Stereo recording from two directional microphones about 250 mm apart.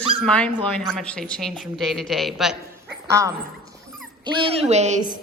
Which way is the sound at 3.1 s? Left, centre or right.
Centre.